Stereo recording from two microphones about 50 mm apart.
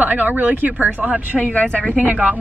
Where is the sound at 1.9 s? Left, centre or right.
Right.